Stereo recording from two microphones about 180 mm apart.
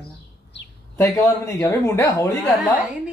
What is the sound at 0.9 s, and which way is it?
Speech, 20° left (ahead or behind).